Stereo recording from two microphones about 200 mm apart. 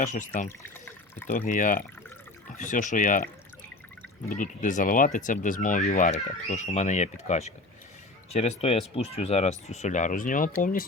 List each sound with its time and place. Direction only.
0.0 s speech: 40° left (ahead or behind)
0.4 s water: 10° left (ahead or behind)
1.5 s speech: 40° left (ahead or behind)
4.3 s speech: 40° left (ahead or behind)